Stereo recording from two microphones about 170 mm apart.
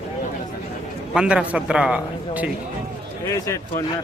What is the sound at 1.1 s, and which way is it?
A man's voice, 5° right (ahead or behind).